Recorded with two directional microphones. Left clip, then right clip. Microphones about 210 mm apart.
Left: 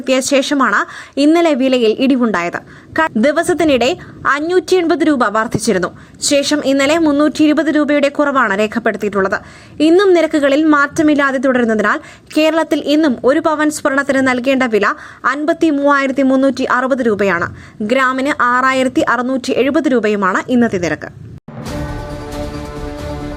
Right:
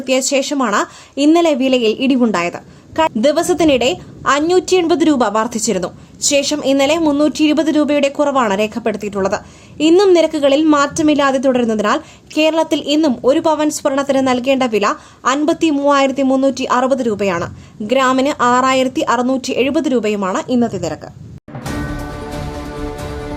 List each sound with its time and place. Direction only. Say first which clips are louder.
0.0 s a woman's voice: left 2 dB; 10° left (ahead or behind)
20.6 s speech: left 3 dB; 20° left (ahead or behind)